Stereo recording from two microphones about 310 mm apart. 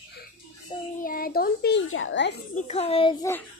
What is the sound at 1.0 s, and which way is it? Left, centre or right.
A child's voice, left.